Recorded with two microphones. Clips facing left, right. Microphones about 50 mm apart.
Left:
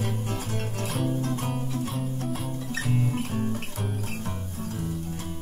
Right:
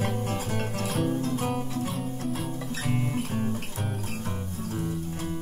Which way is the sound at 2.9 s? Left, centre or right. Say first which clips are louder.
Left 1 dB; centre.